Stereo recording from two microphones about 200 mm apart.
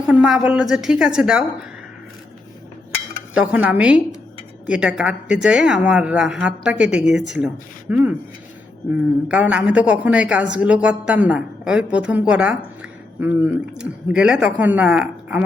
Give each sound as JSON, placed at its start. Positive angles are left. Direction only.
{"t": 0.1, "sound": "a woman's voice", "side_deg": -5}
{"t": 3.3, "sound": "a woman's voice", "side_deg": -5}
{"t": 9.3, "sound": "a woman's voice", "side_deg": -5}